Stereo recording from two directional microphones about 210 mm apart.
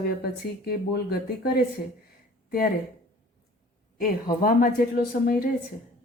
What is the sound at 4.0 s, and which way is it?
Speech, 45° left (ahead or behind).